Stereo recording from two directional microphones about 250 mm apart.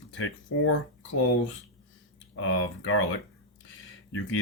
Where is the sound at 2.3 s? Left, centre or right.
Left.